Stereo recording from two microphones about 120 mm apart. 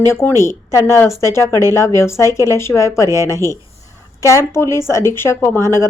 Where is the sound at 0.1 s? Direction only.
20° left (ahead or behind).